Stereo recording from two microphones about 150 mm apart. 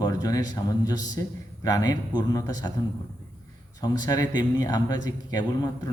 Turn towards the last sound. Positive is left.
turn(degrees=25)  # may be behind; listen again after turning